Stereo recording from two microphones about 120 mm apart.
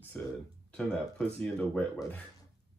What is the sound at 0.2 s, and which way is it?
Speech, 10° left (ahead or behind).